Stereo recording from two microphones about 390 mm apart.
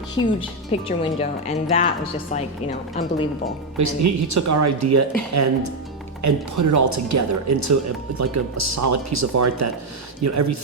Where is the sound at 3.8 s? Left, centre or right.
Right.